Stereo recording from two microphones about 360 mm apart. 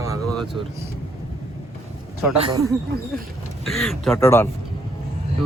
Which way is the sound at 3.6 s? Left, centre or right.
Centre.